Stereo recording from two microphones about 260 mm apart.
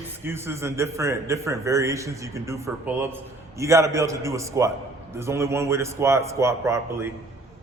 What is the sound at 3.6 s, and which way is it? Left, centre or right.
A man's voice, centre.